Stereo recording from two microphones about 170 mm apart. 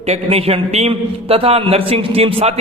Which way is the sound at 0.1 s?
35° right (ahead or behind).